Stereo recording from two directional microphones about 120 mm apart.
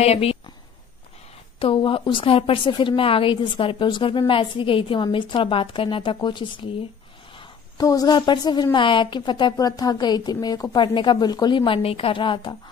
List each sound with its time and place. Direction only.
0.0 s speech: 55° left (ahead or behind)
1.6 s a woman's voice: 45° left (ahead or behind)
7.3 s a sound: 30° left (ahead or behind)
8.2 s a woman's voice: 40° left (ahead or behind)